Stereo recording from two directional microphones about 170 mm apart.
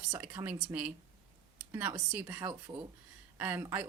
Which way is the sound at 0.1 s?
10° right (ahead or behind).